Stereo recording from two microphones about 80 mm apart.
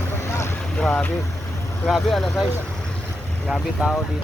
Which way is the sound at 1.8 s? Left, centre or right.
Centre.